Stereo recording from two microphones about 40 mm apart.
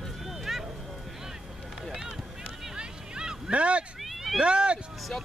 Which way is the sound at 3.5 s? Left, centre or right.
Right.